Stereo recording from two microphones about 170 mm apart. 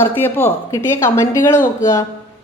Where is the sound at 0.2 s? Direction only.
10° left (ahead or behind).